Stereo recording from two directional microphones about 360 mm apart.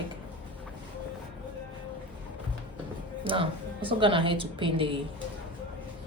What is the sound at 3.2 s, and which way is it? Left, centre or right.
A woman's voice, centre.